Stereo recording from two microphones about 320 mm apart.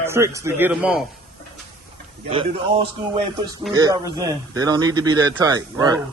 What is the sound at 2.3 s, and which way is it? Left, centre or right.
A man's voice, centre.